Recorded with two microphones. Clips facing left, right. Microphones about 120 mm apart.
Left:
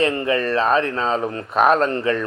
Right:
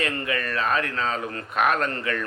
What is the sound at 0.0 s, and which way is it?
Speech, 25° left (ahead or behind).